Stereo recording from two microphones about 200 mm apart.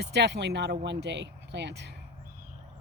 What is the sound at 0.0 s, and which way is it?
Speech, 55° right (ahead or behind).